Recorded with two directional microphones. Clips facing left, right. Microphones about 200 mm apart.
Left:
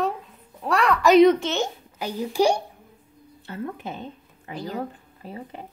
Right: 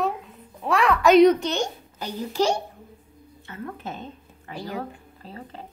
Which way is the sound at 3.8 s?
10° left (ahead or behind).